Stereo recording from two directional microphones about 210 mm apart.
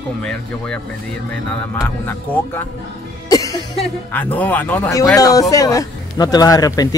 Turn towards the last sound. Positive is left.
turn(degrees=15)  # may be behind; listen again after turning